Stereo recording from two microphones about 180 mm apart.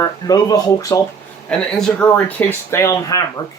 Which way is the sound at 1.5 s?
5° left (ahead or behind).